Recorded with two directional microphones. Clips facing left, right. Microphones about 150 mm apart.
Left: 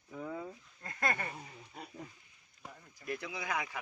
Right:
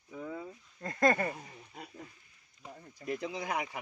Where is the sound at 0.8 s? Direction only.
40° right (ahead or behind).